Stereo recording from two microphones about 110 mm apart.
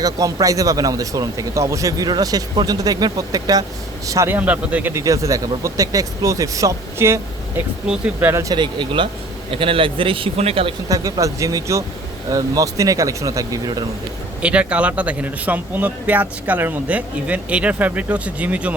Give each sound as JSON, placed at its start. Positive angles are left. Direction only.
{"t": 0.0, "sound": "speech", "side_deg": -35}
{"t": 4.3, "sound": "speech", "side_deg": -15}
{"t": 5.0, "sound": "speech", "side_deg": -30}
{"t": 7.9, "sound": "speech", "side_deg": -10}
{"t": 8.3, "sound": "speech", "side_deg": -25}
{"t": 8.5, "sound": "a man's voice", "side_deg": -45}
{"t": 10.8, "sound": "speech", "side_deg": -30}
{"t": 14.4, "sound": "speech", "side_deg": -10}